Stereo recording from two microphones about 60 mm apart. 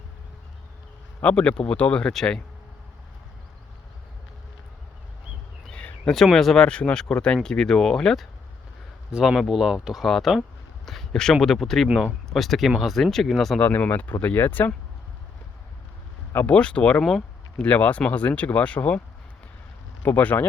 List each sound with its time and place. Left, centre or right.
1.2 s speech: centre
6.3 s speech: centre
6.7 s speech: centre
13.6 s speech: left
16.5 s speech: centre
17.0 s speech: centre
17.6 s speech: left